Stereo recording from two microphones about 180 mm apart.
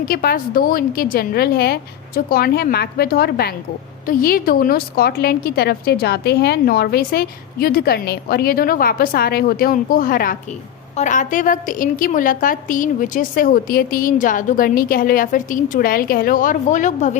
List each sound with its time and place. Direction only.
0.0 s a woman's voice: 55° left (ahead or behind)